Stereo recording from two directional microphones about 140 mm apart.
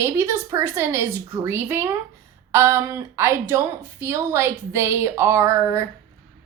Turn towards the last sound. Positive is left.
turn(degrees=-20)  # may be behind; listen again after turning